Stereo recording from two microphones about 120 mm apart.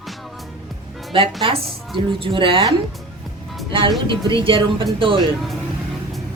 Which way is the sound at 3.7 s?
45° right (ahead or behind).